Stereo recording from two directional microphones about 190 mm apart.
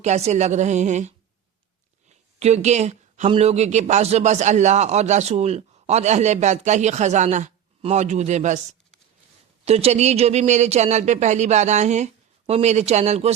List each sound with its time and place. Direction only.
0.0 s speech: 35° right (ahead or behind)
9.6 s speech: 35° right (ahead or behind)